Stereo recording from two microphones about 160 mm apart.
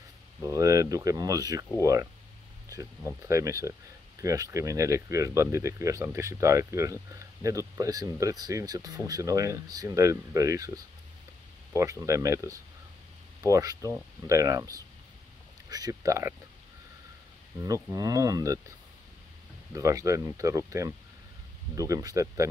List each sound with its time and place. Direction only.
0.4 s speech: 20° right (ahead or behind)
17.6 s speech: 20° right (ahead or behind)
19.7 s speech: 20° right (ahead or behind)